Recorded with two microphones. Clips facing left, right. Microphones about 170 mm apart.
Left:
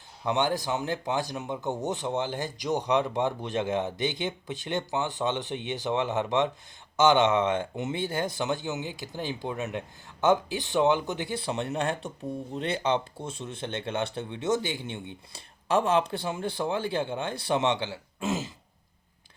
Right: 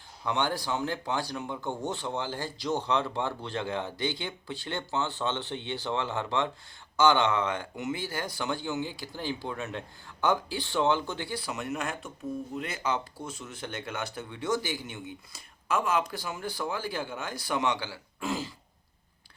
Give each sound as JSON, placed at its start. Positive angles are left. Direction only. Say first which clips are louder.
{"t": 0.3, "sound": "speech", "louder": "left 3 dB", "side_deg": 20}